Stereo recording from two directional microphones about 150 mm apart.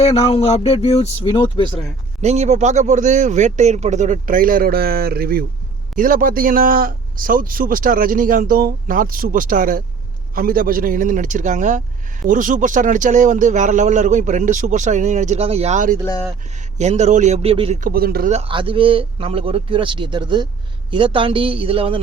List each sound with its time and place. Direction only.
0.0 s speech: 40° left (ahead or behind)
2.2 s speech: 50° right (ahead or behind); by 5.5 s 80° right
6.0 s a man's voice: 70° right (ahead or behind); by 17.7 s 40° right (ahead or behind)
17.7 s speech: 75° right (ahead or behind)
18.3 s a man's voice: 45° right (ahead or behind)
18.5 s speech: 35° right (ahead or behind)